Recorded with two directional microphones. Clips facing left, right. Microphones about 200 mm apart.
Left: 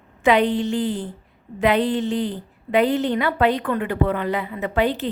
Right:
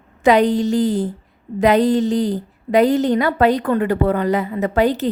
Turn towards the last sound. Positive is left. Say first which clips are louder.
# right 5 dB
turn(degrees=-40)  # may be behind; listen again after turning